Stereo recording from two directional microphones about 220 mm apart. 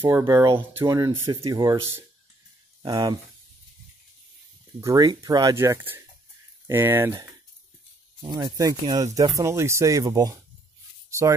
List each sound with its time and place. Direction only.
0.0 s speech: 15° right (ahead or behind)
4.7 s speech: 15° right (ahead or behind)
8.3 s speech: 20° right (ahead or behind)